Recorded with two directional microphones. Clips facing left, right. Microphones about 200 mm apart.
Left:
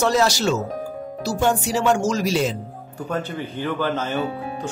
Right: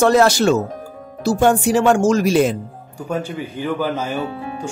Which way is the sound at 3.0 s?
10° right (ahead or behind).